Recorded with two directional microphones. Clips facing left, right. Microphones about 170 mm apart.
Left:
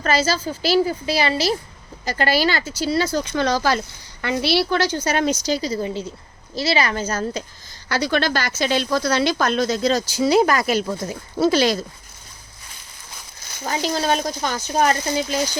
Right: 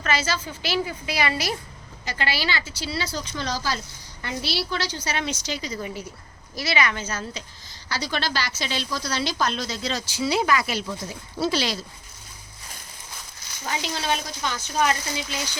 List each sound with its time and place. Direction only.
0.0 s speech: 35° left (ahead or behind)
2.0 s speech: 45° left (ahead or behind)
7.9 s speech: 55° left (ahead or behind)
13.7 s speech: 40° left (ahead or behind)